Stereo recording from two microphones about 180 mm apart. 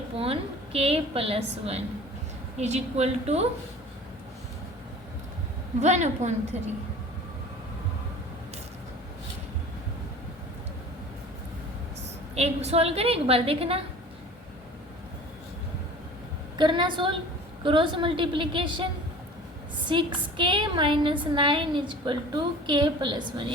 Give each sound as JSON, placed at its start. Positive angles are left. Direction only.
{"t": 0.2, "sound": "a woman's voice", "side_deg": -30}
{"t": 5.8, "sound": "a woman's voice", "side_deg": -40}
{"t": 12.3, "sound": "a woman's voice", "side_deg": -35}
{"t": 16.6, "sound": "a woman's voice", "side_deg": -25}
{"t": 19.9, "sound": "a woman's voice", "side_deg": -25}